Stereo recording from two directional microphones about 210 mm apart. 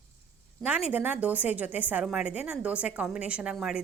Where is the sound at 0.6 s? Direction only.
5° right (ahead or behind).